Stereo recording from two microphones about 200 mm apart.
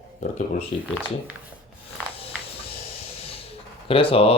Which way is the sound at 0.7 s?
30° left (ahead or behind).